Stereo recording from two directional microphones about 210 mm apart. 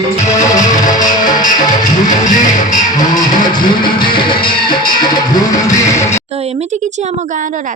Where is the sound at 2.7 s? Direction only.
20° left (ahead or behind).